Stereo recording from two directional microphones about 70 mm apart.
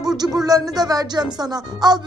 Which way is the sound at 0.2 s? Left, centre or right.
Right.